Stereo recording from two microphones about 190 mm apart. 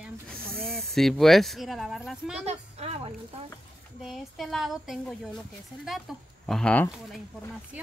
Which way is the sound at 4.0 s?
Centre (ahead or behind).